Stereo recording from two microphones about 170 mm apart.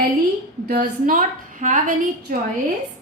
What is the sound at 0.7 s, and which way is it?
A woman's voice, 60° right (ahead or behind).